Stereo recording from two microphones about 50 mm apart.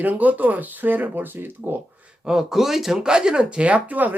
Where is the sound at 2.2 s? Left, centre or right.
Centre; by 4.1 s right.